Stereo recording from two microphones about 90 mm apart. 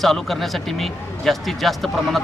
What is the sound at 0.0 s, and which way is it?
Speech, centre (ahead or behind).